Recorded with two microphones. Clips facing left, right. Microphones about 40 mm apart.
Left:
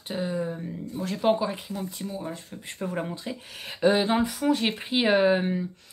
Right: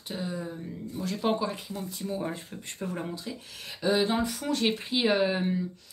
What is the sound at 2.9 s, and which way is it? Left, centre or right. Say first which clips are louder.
Speech: left 4 dB; left.